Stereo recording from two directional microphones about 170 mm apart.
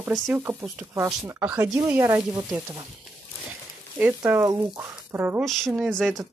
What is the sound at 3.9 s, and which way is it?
Speech, 10° right (ahead or behind).